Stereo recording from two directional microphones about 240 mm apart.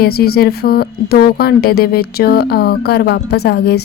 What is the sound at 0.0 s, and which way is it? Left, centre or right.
Speech, left.